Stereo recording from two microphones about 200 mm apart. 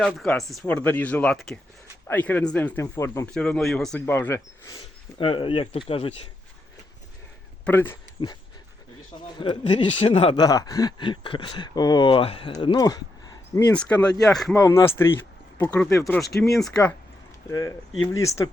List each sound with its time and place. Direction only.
0.0 s speech: centre (ahead or behind)
3.3 s speech: 5° left (ahead or behind)
5.1 s speech: 25° left (ahead or behind)
7.6 s speech: 10° left (ahead or behind)
9.4 s speech: 25° left (ahead or behind)
13.7 s speech: 5° left (ahead or behind)
14.5 s speech: 15° left (ahead or behind)
17.5 s speech: 15° left (ahead or behind)